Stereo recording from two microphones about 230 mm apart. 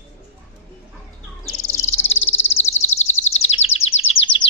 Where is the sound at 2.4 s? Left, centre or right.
Left.